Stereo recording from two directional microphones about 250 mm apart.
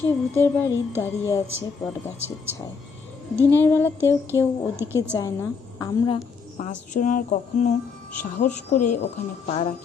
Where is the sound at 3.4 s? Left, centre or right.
Centre.